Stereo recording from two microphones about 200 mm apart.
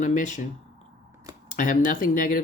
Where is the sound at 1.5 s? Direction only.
40° left (ahead or behind).